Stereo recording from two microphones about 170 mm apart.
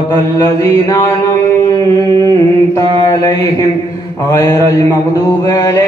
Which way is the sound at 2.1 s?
20° left (ahead or behind).